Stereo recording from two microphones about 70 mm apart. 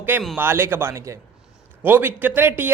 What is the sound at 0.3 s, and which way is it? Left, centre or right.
Speech, right.